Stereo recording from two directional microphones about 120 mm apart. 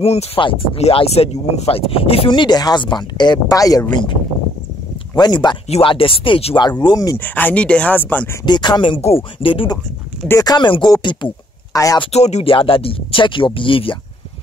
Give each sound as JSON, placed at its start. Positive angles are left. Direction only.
{"t": 0.0, "sound": "speech", "side_deg": 60}
{"t": 0.4, "sound": "speech", "side_deg": 45}
{"t": 5.1, "sound": "speech", "side_deg": 35}
{"t": 5.7, "sound": "speech", "side_deg": 50}
{"t": 7.2, "sound": "speech", "side_deg": 15}
{"t": 8.5, "sound": "speech", "side_deg": 40}
{"t": 11.7, "sound": "speech", "side_deg": 30}
{"t": 12.1, "sound": "speech", "side_deg": 65}
{"t": 12.4, "sound": "speech", "side_deg": 50}